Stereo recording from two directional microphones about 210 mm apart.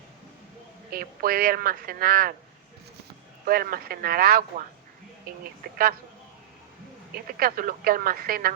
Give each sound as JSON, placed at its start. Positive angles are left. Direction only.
{"t": 0.9, "sound": "speech", "side_deg": -45}
{"t": 3.4, "sound": "speech", "side_deg": -45}
{"t": 7.1, "sound": "speech", "side_deg": -45}